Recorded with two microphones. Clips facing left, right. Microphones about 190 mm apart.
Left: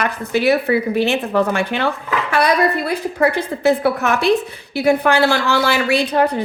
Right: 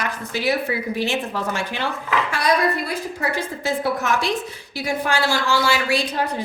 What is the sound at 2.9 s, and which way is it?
A woman's voice, 60° left (ahead or behind).